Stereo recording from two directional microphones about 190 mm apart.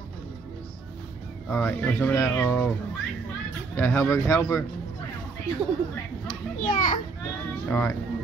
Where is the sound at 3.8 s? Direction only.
10° left (ahead or behind).